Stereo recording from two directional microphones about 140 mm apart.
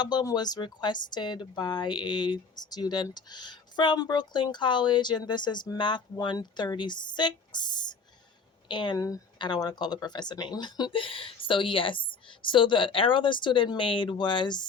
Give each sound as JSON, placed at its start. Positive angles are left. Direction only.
{"t": 0.0, "sound": "speech", "side_deg": 30}